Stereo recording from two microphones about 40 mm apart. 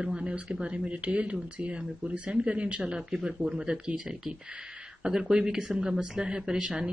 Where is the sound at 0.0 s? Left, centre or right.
Right.